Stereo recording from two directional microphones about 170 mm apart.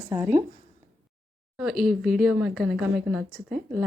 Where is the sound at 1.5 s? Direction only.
Centre (ahead or behind).